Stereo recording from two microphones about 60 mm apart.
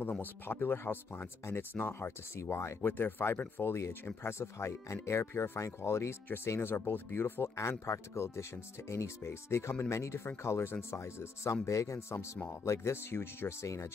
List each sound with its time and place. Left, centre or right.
0.2 s speech: left
2.9 s speech: left
7.8 s speech: left
12.9 s speech: left